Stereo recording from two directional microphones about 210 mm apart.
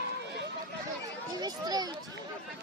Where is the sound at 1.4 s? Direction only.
20° right (ahead or behind).